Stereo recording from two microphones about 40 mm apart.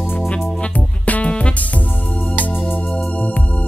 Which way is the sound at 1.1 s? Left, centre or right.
Left.